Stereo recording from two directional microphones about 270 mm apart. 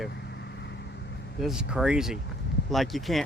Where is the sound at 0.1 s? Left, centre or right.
Left.